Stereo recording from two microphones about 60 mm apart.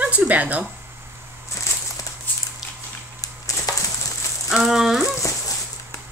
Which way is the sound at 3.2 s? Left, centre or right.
Left.